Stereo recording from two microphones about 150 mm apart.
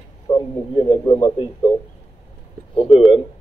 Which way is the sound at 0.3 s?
30° left (ahead or behind).